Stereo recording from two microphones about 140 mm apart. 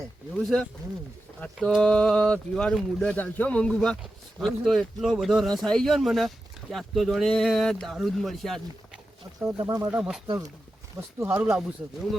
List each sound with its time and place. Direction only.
0.3 s speech: 5° left (ahead or behind)
9.4 s speech: 10° right (ahead or behind)
9.6 s speech: 20° right (ahead or behind)
11.4 s speech: 5° right (ahead or behind)